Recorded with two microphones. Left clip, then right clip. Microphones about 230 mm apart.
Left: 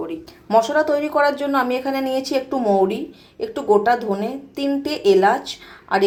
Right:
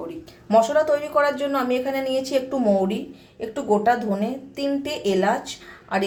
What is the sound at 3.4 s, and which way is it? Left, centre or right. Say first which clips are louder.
A woman's voice: left 3 dB; centre.